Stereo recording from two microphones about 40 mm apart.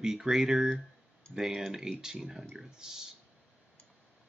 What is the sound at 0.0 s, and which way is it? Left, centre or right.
Speech, centre.